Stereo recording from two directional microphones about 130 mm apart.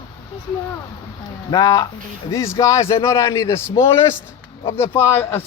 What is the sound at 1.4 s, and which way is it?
Speech, 30° left (ahead or behind).